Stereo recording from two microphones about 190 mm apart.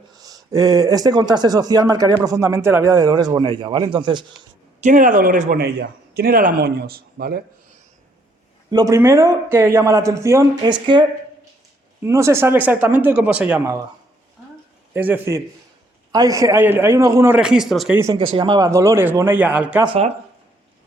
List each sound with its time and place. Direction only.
0.1 s speech: 20° right (ahead or behind)
4.8 s speech: 40° right (ahead or behind)
8.7 s a man's voice: 15° right (ahead or behind)
12.0 s a man's voice: 15° right (ahead or behind)
14.9 s a man's voice: 10° right (ahead or behind)
17.9 s a man's voice: 15° right (ahead or behind)
19.8 s speech: 25° right (ahead or behind)